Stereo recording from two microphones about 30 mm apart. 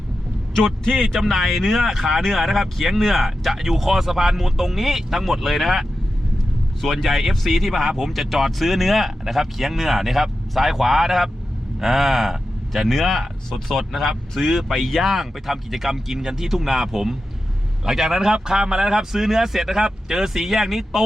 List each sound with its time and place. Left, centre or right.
0.5 s a man's voice: centre
1.2 s speech: centre
6.9 s speech: centre
13.5 s a man's voice: centre